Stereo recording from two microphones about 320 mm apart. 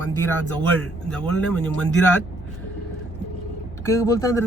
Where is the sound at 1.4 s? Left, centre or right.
Centre.